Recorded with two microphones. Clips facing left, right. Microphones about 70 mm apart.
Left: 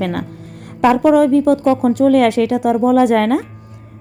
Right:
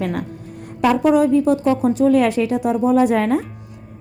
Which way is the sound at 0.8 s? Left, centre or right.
Left.